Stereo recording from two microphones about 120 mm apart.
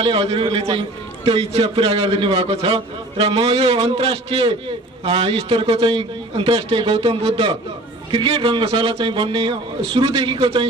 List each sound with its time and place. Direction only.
0.0 s a man's voice: 50° right (ahead or behind)